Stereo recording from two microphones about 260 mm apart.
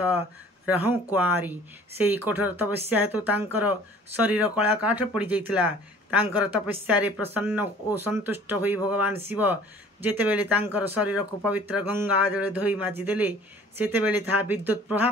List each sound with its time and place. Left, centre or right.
0.7 s speech: centre